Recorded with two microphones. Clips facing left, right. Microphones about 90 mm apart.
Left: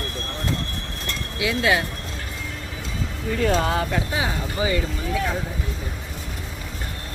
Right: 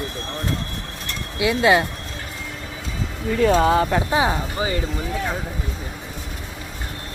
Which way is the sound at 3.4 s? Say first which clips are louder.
Right 6 dB; 20° right (ahead or behind).